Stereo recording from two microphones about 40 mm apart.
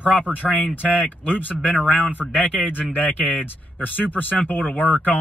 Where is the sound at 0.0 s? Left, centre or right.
Left.